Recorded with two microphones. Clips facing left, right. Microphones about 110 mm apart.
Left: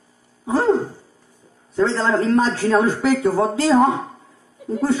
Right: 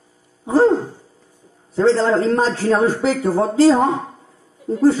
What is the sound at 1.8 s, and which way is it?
Speech, 35° right (ahead or behind).